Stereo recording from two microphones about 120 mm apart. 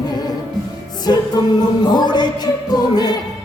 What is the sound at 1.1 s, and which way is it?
Music, 35° left (ahead or behind).